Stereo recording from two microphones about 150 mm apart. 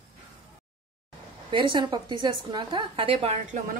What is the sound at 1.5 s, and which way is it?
A woman's voice, 30° right (ahead or behind).